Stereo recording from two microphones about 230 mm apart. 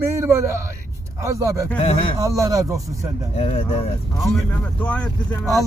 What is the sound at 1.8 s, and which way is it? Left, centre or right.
Speech, left.